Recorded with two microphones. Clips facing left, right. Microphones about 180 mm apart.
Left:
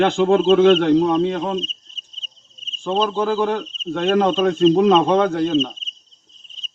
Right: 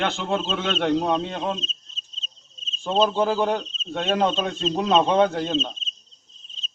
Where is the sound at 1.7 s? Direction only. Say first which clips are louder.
Even; 55° left (ahead or behind).